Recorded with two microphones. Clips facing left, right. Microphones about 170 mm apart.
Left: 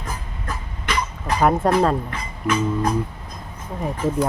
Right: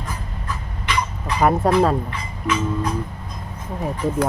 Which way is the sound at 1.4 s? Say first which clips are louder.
Right 1 dB; centre (ahead or behind).